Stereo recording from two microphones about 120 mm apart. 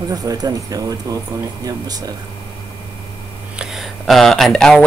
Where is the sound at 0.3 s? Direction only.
30° right (ahead or behind).